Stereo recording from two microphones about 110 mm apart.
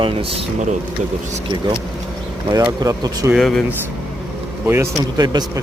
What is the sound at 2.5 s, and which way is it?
Speech, 35° right (ahead or behind).